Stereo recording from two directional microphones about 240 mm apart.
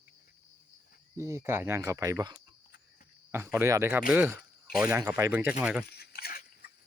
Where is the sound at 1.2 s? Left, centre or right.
Centre.